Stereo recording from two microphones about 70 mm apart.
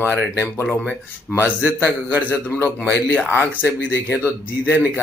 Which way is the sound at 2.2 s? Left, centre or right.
Left.